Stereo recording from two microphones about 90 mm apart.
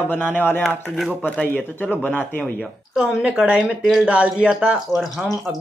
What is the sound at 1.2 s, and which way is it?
Speech, 15° left (ahead or behind).